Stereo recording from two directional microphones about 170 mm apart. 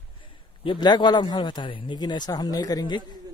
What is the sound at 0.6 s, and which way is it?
Speech, 25° left (ahead or behind).